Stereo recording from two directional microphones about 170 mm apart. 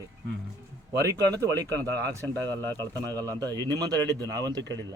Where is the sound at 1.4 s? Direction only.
20° right (ahead or behind).